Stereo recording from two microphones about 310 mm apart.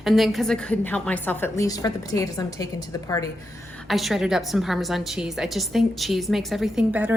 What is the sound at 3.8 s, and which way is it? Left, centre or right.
A woman's voice, centre.